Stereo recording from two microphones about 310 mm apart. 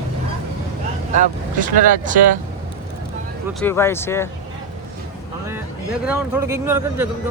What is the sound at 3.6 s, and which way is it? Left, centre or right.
Speech, centre.